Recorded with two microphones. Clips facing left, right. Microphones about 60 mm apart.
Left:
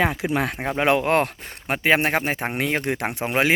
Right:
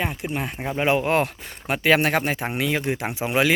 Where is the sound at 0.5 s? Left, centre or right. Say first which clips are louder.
Left 2 dB; left.